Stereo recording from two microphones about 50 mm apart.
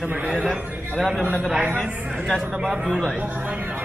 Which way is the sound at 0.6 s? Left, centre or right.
Right.